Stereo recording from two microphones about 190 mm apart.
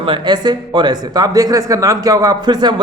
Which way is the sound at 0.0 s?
25° right (ahead or behind).